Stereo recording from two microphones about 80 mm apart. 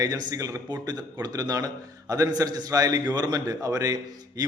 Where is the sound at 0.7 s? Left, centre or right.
Right.